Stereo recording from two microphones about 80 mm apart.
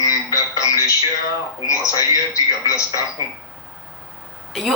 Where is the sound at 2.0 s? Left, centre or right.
Left.